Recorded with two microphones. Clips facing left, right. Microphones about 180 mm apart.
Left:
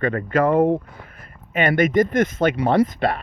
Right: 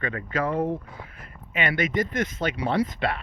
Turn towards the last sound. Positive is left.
turn(degrees=45)  # may be behind; listen again after turning